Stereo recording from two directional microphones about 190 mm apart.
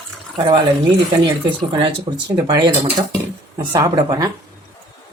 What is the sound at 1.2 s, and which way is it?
Speech, 25° right (ahead or behind).